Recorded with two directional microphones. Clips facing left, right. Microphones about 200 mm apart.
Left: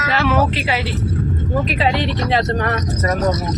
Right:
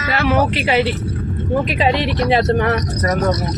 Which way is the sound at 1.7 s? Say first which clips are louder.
Right 2 dB; 15° right (ahead or behind).